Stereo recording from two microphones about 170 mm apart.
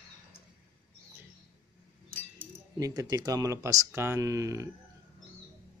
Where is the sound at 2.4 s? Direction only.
20° right (ahead or behind).